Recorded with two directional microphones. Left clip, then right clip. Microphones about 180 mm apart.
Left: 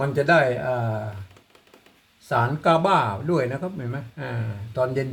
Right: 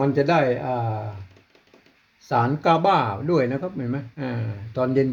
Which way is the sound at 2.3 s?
40° right (ahead or behind).